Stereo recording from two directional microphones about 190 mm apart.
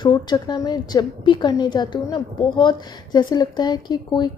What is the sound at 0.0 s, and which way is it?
A woman's voice, 25° left (ahead or behind).